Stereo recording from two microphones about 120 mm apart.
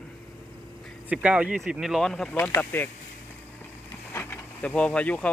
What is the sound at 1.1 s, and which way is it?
Speech, 10° right (ahead or behind).